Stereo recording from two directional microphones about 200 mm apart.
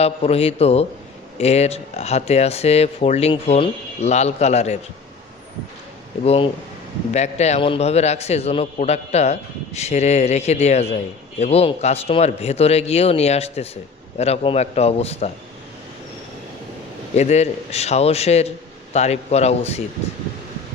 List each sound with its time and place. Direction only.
0.0 s a man's voice: 30° left (ahead or behind)
6.2 s a man's voice: 30° left (ahead or behind)
17.2 s a man's voice: 35° left (ahead or behind)